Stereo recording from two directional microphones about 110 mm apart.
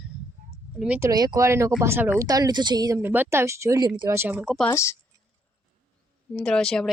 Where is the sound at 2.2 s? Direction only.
35° right (ahead or behind).